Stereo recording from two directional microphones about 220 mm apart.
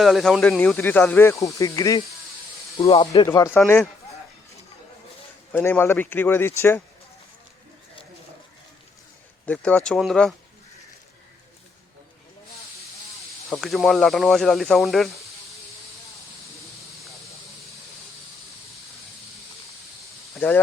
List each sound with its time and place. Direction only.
0.0 s speech: centre (ahead or behind)
5.5 s speech: 5° left (ahead or behind)
9.5 s speech: 5° left (ahead or behind)
13.5 s speech: centre (ahead or behind)
20.4 s speech: 10° left (ahead or behind)